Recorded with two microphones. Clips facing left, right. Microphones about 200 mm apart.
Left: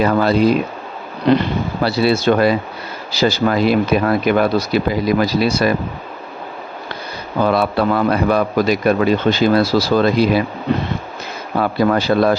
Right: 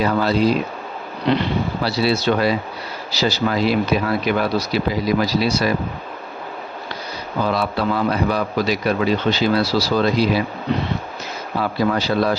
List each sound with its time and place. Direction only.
0.0 s a man's voice: 55° left (ahead or behind)
7.4 s a man's voice: 55° left (ahead or behind)
11.5 s a man's voice: 55° left (ahead or behind)